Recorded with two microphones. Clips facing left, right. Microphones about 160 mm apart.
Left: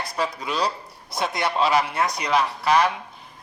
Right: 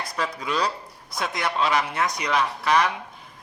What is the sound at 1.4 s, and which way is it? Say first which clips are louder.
A man's voice: left 2 dB; 30° left (ahead or behind).